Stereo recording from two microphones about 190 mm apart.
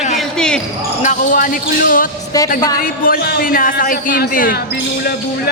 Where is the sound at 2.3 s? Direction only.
20° left (ahead or behind).